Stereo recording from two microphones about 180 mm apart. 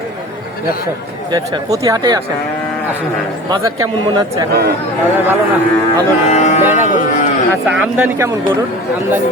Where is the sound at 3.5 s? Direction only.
20° right (ahead or behind).